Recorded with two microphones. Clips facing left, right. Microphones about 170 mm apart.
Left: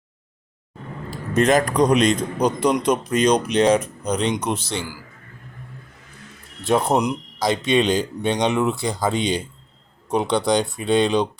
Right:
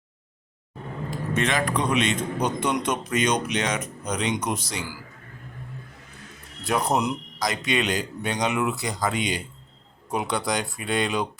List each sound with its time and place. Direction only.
1.1 s a man's voice: 40° left (ahead or behind)
6.7 s speech: 25° left (ahead or behind)